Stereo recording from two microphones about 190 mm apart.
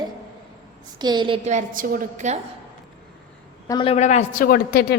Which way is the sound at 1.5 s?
40° right (ahead or behind).